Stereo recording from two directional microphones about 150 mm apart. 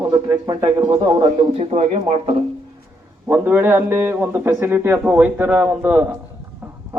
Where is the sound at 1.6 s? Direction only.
45° right (ahead or behind).